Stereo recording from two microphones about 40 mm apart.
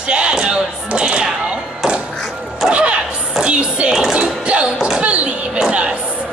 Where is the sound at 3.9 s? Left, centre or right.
Centre.